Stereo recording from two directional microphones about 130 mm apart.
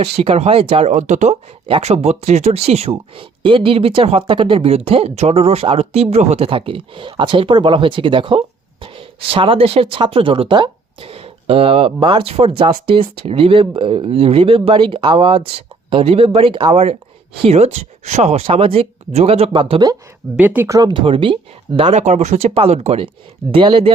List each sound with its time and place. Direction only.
0.0 s speech: 50° right (ahead or behind); by 1.4 s 65° right (ahead or behind)
1.6 s speech: 50° right (ahead or behind)
20.3 s speech: 10° right (ahead or behind)
20.7 s speech: 30° right (ahead or behind)
21.9 s speech: 60° right (ahead or behind)
23.5 s speech: 40° right (ahead or behind)